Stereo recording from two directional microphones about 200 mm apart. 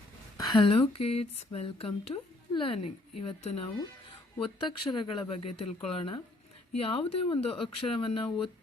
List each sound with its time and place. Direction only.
0.3 s speech: 20° left (ahead or behind)
2.1 s a woman's voice: 15° left (ahead or behind)